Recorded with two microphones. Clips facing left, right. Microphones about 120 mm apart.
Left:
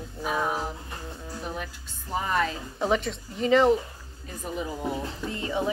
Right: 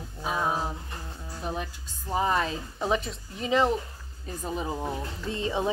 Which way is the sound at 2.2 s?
25° right (ahead or behind).